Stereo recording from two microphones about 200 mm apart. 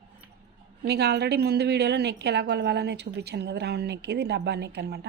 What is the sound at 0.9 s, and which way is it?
A woman's voice, 55° right (ahead or behind).